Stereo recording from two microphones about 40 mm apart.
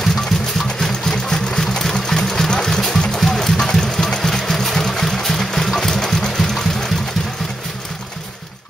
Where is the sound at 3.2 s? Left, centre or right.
Centre.